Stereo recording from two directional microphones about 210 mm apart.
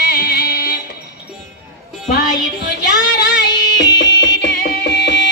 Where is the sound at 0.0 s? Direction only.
50° left (ahead or behind).